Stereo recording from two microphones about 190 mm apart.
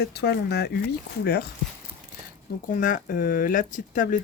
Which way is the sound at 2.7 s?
45° left (ahead or behind).